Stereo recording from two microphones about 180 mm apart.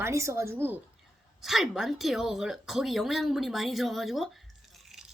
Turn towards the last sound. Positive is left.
turn(degrees=0)  # may be behind; listen again after turning